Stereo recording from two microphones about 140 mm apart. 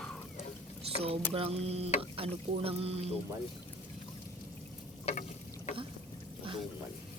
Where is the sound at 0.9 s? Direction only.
45° right (ahead or behind).